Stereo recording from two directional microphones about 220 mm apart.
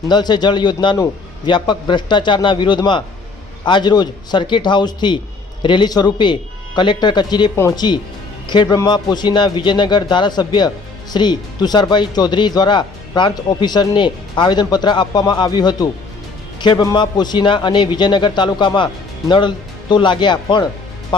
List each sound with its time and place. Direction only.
0.1 s speech: 20° left (ahead or behind)